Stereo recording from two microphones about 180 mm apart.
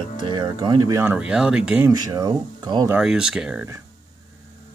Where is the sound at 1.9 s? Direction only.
20° right (ahead or behind).